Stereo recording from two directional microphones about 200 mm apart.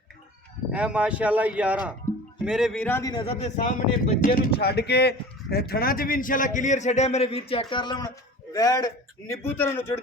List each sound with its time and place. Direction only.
0.7 s speech: 5° right (ahead or behind); by 3.1 s 10° left (ahead or behind)
3.1 s speech: 25° left (ahead or behind); by 4.4 s 45° left (ahead or behind)
4.6 s a man's voice: 55° left (ahead or behind); by 10.0 s 10° left (ahead or behind)